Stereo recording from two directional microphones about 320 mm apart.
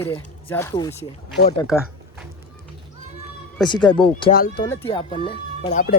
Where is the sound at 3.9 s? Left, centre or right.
Centre.